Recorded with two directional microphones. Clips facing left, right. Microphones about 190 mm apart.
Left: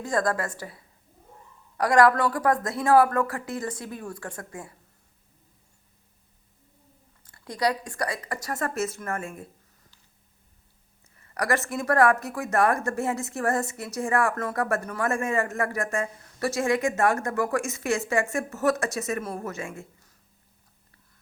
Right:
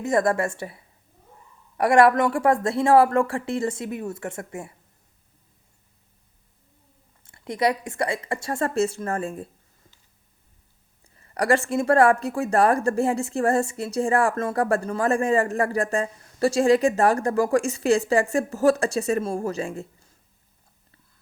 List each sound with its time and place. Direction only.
0.0 s a woman's voice: 25° right (ahead or behind)
7.3 s a woman's voice: 25° right (ahead or behind)
11.2 s speech: 30° right (ahead or behind)
19.8 s a sound: 25° right (ahead or behind)